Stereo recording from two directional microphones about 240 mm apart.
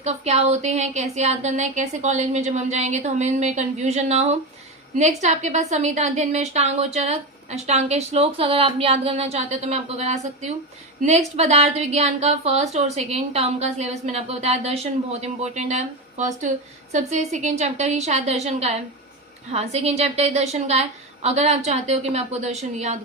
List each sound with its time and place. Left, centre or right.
0.0 s a woman's voice: right